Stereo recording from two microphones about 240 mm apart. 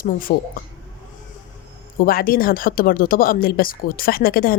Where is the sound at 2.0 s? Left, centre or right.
Left.